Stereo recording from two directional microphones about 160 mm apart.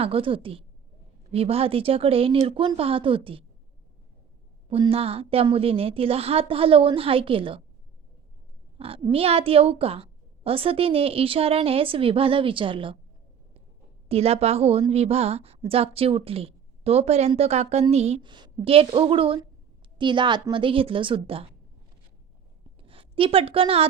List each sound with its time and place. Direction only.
0.0 s a woman's voice: 35° right (ahead or behind)
4.7 s a woman's voice: 35° right (ahead or behind)
8.8 s a woman's voice: 35° right (ahead or behind)
14.1 s a woman's voice: 40° right (ahead or behind)
18.3 s a woman's voice: 30° right (ahead or behind)
22.8 s a woman's voice: 35° right (ahead or behind)